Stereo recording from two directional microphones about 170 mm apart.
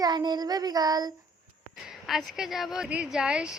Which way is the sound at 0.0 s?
25° right (ahead or behind).